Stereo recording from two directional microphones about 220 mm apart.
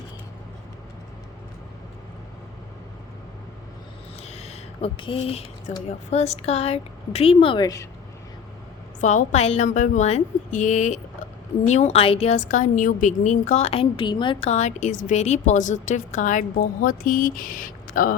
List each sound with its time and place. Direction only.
4.2 s speech: 30° left (ahead or behind)
9.0 s a woman's voice: 35° left (ahead or behind)